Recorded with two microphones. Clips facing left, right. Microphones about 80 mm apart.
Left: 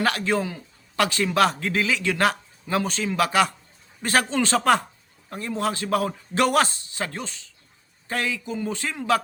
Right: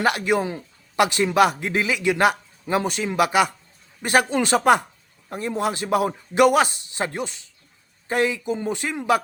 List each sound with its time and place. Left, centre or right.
0.0 s a man's voice: centre